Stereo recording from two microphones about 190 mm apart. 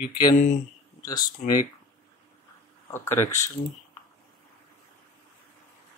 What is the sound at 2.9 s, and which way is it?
Speech, 15° left (ahead or behind).